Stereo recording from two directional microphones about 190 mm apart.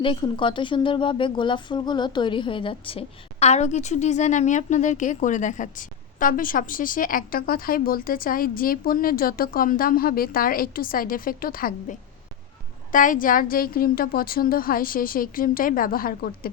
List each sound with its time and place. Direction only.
0.0 s a woman's voice: 25° left (ahead or behind); by 16.5 s 50° left (ahead or behind)